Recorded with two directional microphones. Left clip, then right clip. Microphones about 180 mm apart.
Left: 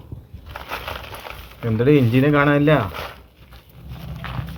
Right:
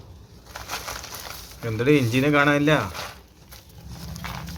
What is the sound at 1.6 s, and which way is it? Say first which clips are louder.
Speech: left 4 dB; 25° left (ahead or behind).